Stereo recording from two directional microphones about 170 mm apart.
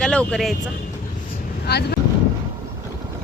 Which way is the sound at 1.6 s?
70° left (ahead or behind).